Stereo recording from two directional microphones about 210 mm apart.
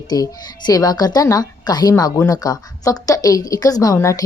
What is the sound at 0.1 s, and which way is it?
A woman's voice, 20° left (ahead or behind).